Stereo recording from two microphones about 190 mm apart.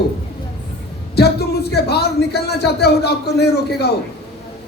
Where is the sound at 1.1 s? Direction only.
60° left (ahead or behind).